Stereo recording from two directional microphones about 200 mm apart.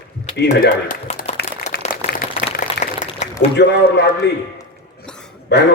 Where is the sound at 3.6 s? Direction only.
60° left (ahead or behind).